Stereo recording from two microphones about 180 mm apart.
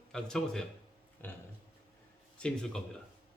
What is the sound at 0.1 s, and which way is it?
Speech, 5° left (ahead or behind).